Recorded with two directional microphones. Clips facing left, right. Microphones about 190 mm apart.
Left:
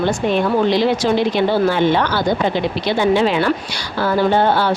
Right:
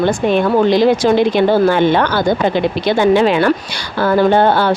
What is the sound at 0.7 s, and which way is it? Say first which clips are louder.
A woman's voice: right 4 dB; 45° right (ahead or behind).